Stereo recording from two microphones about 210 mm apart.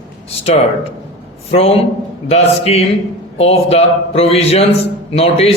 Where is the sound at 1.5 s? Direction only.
30° left (ahead or behind).